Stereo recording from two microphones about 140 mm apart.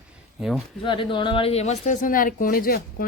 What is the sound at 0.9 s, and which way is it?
Speech, 35° left (ahead or behind).